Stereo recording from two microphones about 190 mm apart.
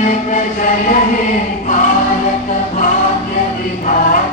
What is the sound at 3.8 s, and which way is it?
Chant, 45° left (ahead or behind).